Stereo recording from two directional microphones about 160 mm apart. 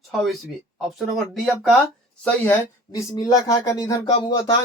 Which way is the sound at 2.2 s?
15° left (ahead or behind).